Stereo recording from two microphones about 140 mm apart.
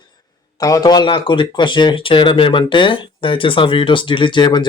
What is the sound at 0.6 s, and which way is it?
Speech, 25° left (ahead or behind).